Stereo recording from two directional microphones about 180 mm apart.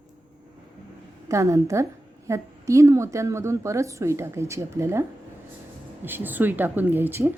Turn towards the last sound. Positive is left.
turn(degrees=-10)  # may be behind; listen again after turning